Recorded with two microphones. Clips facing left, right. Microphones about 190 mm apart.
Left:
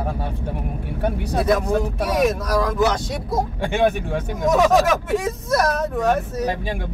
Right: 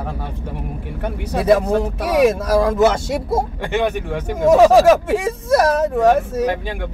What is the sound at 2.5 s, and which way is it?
Speech, 25° right (ahead or behind).